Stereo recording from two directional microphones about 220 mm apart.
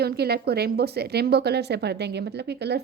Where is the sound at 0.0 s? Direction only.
45° right (ahead or behind).